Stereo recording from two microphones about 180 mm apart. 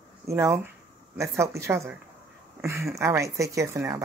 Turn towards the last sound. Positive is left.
turn(degrees=-15)  # may be behind; listen again after turning